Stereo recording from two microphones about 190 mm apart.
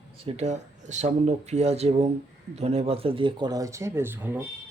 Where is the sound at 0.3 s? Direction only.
35° right (ahead or behind).